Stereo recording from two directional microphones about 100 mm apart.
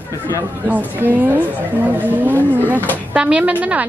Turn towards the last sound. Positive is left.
turn(degrees=-15)  # may be behind; listen again after turning